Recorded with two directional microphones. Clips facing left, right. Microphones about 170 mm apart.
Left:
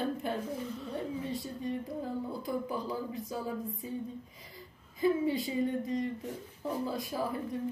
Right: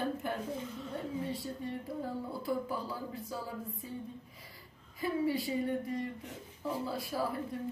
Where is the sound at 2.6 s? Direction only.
20° left (ahead or behind).